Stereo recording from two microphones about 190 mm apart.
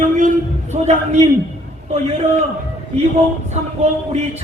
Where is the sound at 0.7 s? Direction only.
35° right (ahead or behind).